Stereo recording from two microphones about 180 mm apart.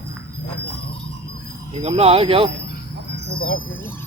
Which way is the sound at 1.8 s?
35° right (ahead or behind).